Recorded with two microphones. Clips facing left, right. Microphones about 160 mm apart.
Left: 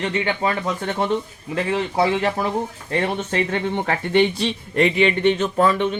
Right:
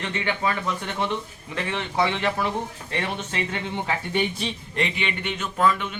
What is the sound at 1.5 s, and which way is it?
Speech, 35° left (ahead or behind).